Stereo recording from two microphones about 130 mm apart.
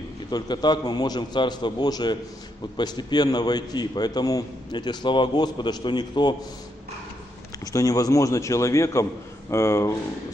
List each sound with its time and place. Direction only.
0.3 s a man's voice: 35° left (ahead or behind)
7.6 s a man's voice: 25° left (ahead or behind)